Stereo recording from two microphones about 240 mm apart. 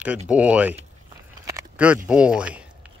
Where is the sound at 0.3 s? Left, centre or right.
Centre.